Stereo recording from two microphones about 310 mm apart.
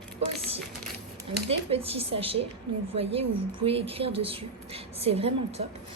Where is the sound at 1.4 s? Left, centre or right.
Centre.